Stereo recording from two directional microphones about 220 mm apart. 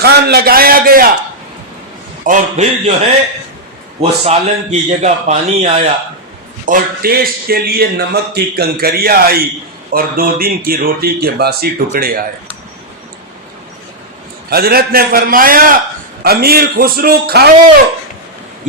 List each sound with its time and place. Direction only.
0.0 s a man's voice: 45° right (ahead or behind)
2.2 s speech: 35° right (ahead or behind)
4.3 s a man's voice: 30° right (ahead or behind)
6.7 s a man's voice: 40° right (ahead or behind)
14.5 s a man's voice: 45° right (ahead or behind)